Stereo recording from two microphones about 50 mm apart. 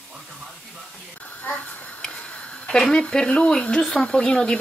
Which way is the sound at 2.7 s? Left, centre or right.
Centre.